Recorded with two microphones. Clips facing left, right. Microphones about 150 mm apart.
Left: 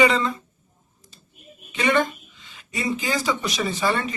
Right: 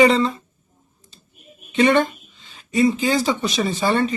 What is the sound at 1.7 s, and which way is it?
A woman's voice, 30° right (ahead or behind).